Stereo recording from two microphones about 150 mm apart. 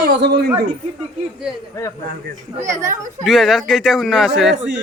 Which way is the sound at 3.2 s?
Centre (ahead or behind).